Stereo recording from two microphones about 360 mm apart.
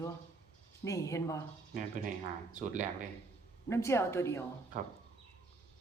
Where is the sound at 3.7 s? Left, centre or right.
Centre.